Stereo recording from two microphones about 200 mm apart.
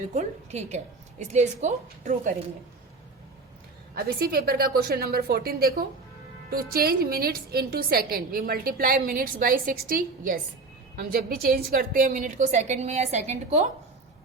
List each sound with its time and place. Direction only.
0.1 s a woman's voice: 35° right (ahead or behind)
3.9 s a woman's voice: 50° right (ahead or behind)